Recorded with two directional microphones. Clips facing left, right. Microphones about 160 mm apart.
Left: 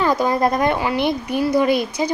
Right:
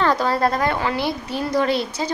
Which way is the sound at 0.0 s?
10° left (ahead or behind).